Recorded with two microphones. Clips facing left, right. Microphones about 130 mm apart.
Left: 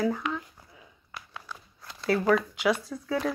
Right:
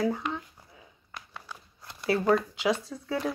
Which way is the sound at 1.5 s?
20° right (ahead or behind).